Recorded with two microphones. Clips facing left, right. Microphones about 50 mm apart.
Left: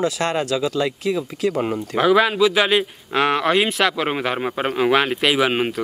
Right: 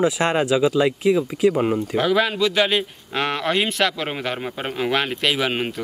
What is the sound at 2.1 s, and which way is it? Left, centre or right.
Speech, centre.